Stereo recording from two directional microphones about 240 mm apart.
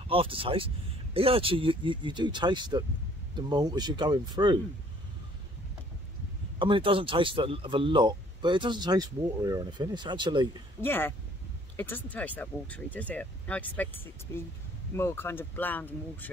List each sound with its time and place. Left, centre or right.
0.1 s speech: right
6.6 s speech: right
10.8 s speech: centre